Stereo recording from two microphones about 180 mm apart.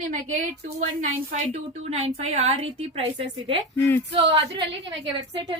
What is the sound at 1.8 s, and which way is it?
Speech, 35° right (ahead or behind).